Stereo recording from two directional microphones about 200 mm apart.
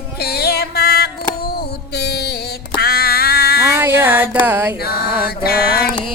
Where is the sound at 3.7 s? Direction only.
10° right (ahead or behind).